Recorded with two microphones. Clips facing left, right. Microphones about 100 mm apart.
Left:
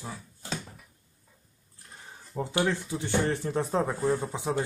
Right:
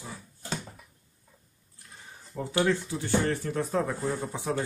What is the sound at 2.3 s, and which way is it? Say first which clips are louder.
Speech: right 1 dB; 20° left (ahead or behind).